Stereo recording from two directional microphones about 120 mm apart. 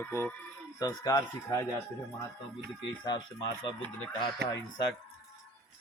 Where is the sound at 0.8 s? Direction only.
30° left (ahead or behind).